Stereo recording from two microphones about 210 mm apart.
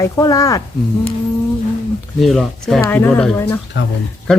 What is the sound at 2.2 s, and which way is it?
Speech, centre (ahead or behind).